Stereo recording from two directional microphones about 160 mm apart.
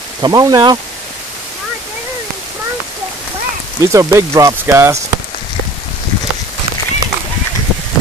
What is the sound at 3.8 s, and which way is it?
Speech, 20° right (ahead or behind).